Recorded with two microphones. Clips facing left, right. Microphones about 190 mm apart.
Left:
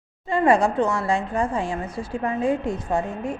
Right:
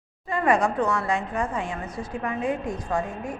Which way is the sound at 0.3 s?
30° left (ahead or behind).